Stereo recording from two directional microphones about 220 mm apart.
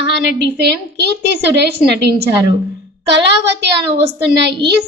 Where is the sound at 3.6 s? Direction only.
50° right (ahead or behind).